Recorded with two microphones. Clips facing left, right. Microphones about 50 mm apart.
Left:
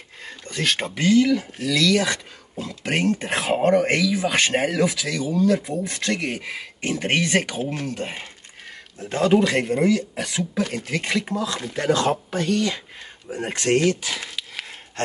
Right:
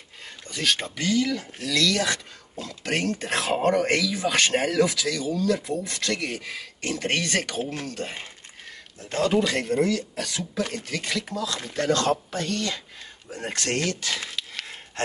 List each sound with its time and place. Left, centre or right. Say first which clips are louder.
0.5 s speech: left 2 dB; left
1.3 s speech: left 5 dB; centre